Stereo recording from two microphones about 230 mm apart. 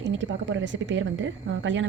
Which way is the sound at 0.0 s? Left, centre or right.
Right.